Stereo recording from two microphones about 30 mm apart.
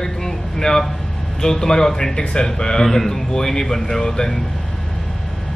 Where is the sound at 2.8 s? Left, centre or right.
Centre.